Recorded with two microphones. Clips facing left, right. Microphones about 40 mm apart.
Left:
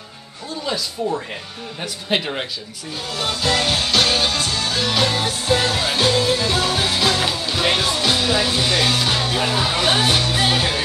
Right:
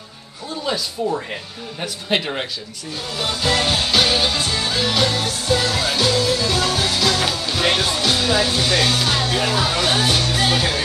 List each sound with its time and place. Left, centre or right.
0.7 s speech: centre
3.2 s music: centre
4.7 s speech: centre
5.1 s music: left